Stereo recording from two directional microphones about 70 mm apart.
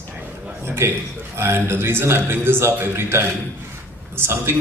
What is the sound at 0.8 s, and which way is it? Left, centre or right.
A man's voice, right.